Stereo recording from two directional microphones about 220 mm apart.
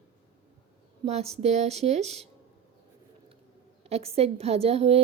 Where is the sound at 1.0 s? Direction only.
30° right (ahead or behind).